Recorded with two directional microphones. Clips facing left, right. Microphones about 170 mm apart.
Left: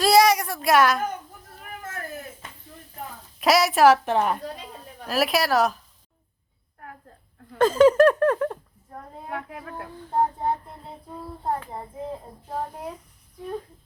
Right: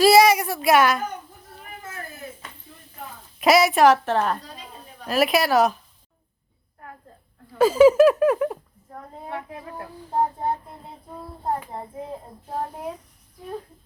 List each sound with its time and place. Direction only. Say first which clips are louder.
0.0 s speech: right 3 dB; 5° right (ahead or behind)
3.3 s a woman's voice: right 3 dB; centre (ahead or behind)
5.0 s speech: right 2 dB; centre (ahead or behind)
7.6 s speech: right 2 dB; 10° right (ahead or behind)
9.3 s speech: even; 20° right (ahead or behind)